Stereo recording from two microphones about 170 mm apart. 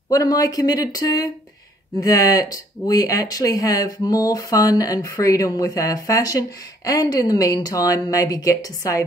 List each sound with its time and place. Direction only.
0.1 s speech: 20° left (ahead or behind)